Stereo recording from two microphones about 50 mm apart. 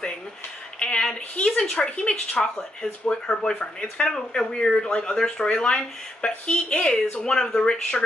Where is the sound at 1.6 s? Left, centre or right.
Left.